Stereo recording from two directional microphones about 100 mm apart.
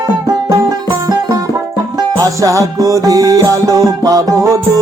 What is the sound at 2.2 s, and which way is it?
Music, 35° right (ahead or behind).